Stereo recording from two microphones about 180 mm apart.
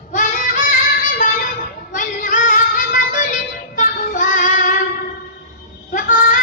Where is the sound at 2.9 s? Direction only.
45° left (ahead or behind).